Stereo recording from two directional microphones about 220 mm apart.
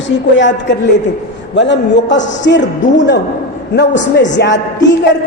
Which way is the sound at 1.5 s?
55° left (ahead or behind).